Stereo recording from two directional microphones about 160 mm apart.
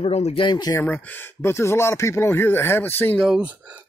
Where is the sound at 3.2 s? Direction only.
5° right (ahead or behind).